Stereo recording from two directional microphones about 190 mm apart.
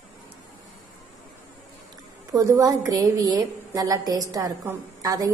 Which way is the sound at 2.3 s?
15° right (ahead or behind).